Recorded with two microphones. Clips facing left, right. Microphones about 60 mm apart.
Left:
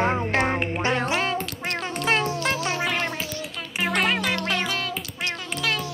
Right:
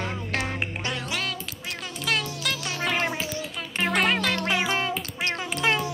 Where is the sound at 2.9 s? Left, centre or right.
Centre.